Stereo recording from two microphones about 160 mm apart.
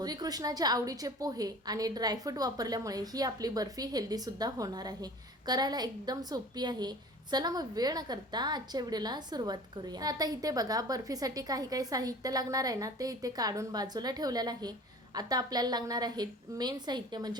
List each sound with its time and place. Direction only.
0.0 s a woman's voice: 25° right (ahead or behind)